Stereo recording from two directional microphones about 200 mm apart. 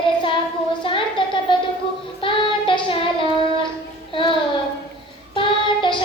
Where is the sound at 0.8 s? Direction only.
25° left (ahead or behind).